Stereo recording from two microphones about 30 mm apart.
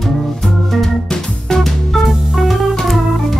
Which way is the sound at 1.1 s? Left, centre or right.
Centre.